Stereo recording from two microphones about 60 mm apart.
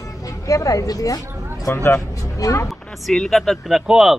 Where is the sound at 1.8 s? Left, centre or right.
Left.